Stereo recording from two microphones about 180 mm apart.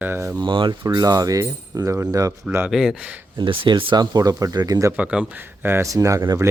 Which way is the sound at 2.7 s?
5° right (ahead or behind).